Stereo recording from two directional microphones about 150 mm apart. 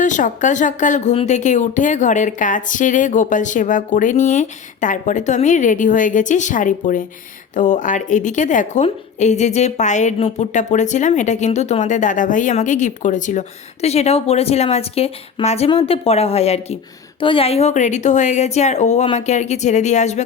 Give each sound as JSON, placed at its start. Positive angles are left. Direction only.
{"t": 0.0, "sound": "speech", "side_deg": 55}
{"t": 1.1, "sound": "a woman's voice", "side_deg": 45}
{"t": 13.8, "sound": "a woman's voice", "side_deg": 45}